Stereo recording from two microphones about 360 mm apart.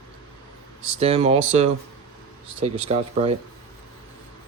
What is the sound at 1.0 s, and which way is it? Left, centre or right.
Speech, centre.